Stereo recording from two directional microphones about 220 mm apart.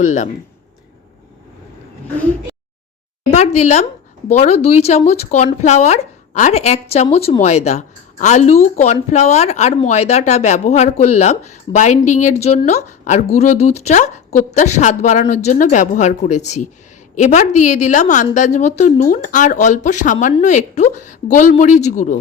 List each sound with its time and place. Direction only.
0.0 s speech: 35° left (ahead or behind)
3.2 s speech: 30° left (ahead or behind)